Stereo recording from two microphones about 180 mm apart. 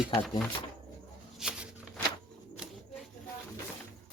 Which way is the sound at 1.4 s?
5° right (ahead or behind).